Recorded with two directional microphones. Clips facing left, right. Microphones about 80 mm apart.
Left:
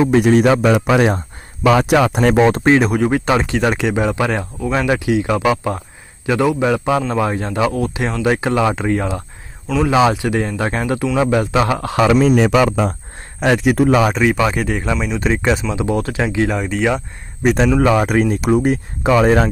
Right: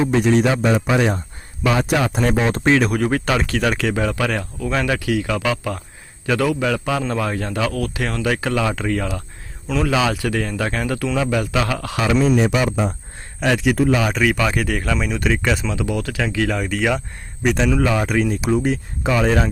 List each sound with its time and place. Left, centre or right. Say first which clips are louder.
0.3 s speech: left 3 dB; left
0.5 s speech: left 4 dB; left
1.6 s speech: left 6 dB; left
2.3 s speech: left 7 dB; left
2.6 s speech: left 3 dB; left
3.0 s speech: left 4 dB; centre
11.9 s speech: left 4 dB; left
13.4 s speech: left 3 dB; left
14.2 s speech: left 3 dB; left
17.4 s speech: left 4 dB; left
17.9 s speech: left 4 dB; left